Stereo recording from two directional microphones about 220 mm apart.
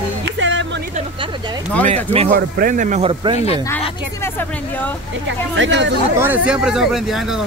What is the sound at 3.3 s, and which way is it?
Speech, 30° left (ahead or behind).